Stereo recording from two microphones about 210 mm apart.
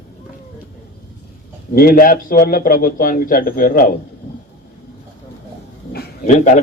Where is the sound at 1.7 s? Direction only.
45° left (ahead or behind).